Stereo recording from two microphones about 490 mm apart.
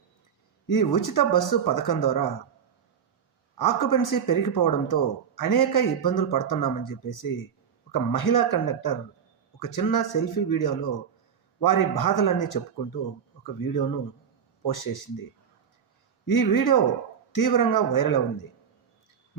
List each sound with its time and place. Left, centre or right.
0.7 s speech: left
3.6 s speech: left
16.2 s speech: left